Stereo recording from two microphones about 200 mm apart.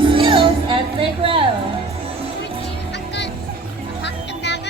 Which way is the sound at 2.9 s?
60° left (ahead or behind).